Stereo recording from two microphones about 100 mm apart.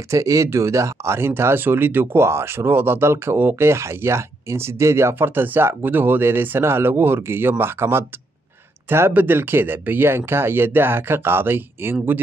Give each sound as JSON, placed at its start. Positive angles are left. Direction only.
{"t": 0.1, "sound": "speech", "side_deg": -30}